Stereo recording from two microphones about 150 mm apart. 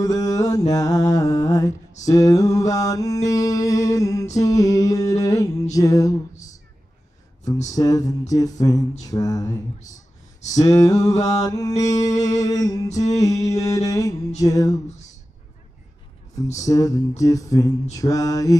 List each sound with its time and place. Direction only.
0.0 s mantra: 25° left (ahead or behind)
7.7 s mantra: 25° left (ahead or behind)
9.8 s a sound: 50° left (ahead or behind)
10.6 s mantra: 25° left (ahead or behind)
16.5 s mantra: 25° left (ahead or behind)